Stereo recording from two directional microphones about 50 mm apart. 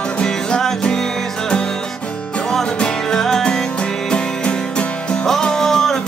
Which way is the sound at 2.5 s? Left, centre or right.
Centre.